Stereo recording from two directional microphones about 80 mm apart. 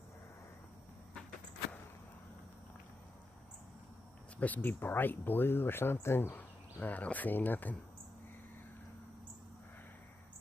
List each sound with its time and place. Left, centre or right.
4.4 s speech: left